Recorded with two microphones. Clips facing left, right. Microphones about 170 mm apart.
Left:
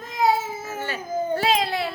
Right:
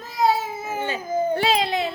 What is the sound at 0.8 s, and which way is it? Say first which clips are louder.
Speech: right 4 dB; 20° right (ahead or behind).